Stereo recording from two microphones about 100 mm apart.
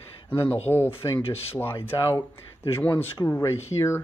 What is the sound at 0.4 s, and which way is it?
Speech, 60° left (ahead or behind).